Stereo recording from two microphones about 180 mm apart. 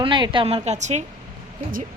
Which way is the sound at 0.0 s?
25° right (ahead or behind).